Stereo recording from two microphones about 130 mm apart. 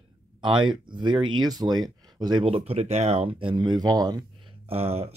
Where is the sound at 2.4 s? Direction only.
50° right (ahead or behind); by 4.2 s 30° right (ahead or behind).